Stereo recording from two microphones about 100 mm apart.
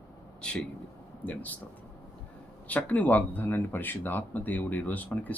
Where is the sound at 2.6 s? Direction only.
15° left (ahead or behind).